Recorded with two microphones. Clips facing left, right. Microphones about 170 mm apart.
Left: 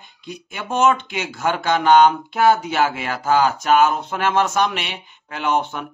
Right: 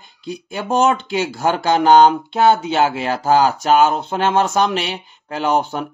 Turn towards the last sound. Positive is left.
turn(degrees=-35)  # may be behind; listen again after turning